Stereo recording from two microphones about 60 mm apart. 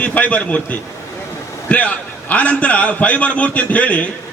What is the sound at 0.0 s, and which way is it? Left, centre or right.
A man's voice, left.